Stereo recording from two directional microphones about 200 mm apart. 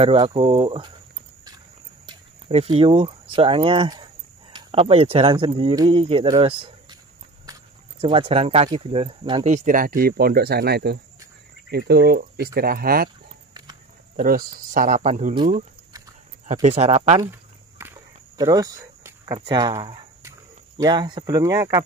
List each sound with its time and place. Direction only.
0.0 s speech: 25° right (ahead or behind)
2.0 s speech: 30° right (ahead or behind)
7.5 s walk: 15° right (ahead or behind)
8.0 s speech: 30° right (ahead or behind)
9.5 s speech: 40° right (ahead or behind)
13.5 s horse: 20° right (ahead or behind)
14.1 s speech: 45° right (ahead or behind)
17.2 s a sound: 10° right (ahead or behind)
19.4 s speech: 20° right (ahead or behind)